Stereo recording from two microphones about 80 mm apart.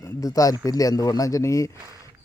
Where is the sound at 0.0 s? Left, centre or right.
Left.